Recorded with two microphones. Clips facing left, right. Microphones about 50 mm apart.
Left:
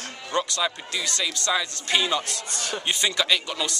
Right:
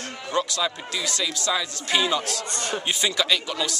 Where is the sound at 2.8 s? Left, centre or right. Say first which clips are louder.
Even; centre.